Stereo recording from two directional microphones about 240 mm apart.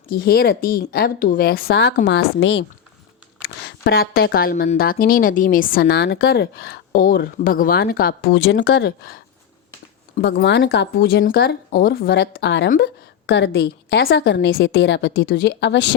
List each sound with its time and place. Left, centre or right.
0.1 s a woman's voice: left